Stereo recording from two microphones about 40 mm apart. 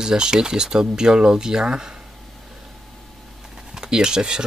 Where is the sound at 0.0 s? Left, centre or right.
Centre.